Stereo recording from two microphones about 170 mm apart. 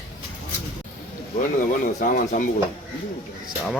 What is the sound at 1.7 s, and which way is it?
Speech, 50° left (ahead or behind).